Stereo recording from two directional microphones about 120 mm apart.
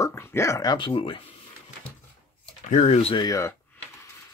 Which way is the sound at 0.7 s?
45° left (ahead or behind).